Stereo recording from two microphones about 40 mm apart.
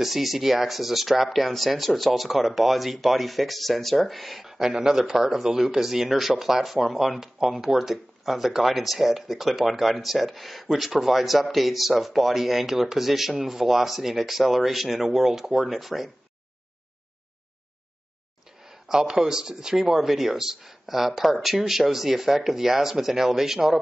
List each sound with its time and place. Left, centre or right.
0.0 s speech: centre
18.7 s speech: centre